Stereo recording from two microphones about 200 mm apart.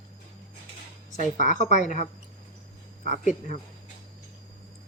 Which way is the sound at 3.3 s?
35° left (ahead or behind).